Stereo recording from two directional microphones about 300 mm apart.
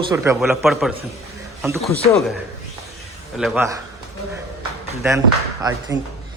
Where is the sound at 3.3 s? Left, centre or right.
Centre.